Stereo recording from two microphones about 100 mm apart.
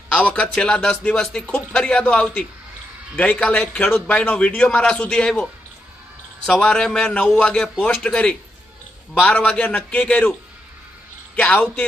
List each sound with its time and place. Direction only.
0.1 s speech: 15° left (ahead or behind)
11.3 s speech: 15° left (ahead or behind)